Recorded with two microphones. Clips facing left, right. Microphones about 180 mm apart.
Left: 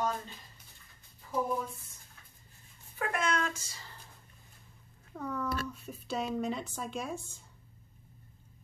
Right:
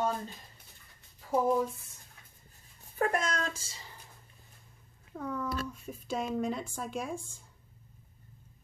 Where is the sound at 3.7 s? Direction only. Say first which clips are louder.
Right 1 dB; 15° right (ahead or behind).